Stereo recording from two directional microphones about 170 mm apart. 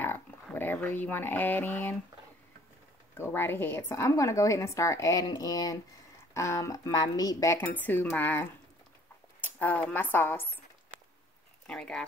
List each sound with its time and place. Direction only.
0.0 s speech: 10° left (ahead or behind)
3.2 s a woman's voice: 15° left (ahead or behind)
9.6 s a woman's voice: 10° left (ahead or behind)
11.6 s speech: 5° left (ahead or behind)